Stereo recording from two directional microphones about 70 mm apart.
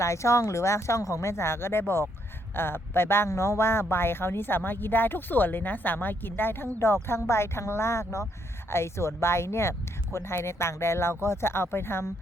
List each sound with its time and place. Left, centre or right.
0.0 s speech: left